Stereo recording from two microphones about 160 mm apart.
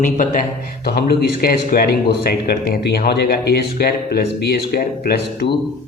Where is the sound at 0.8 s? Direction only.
80° left.